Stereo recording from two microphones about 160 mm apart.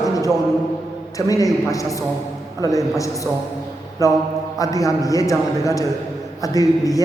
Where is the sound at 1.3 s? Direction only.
20° left (ahead or behind).